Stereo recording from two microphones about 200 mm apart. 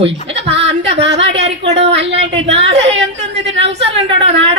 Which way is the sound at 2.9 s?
30° right (ahead or behind).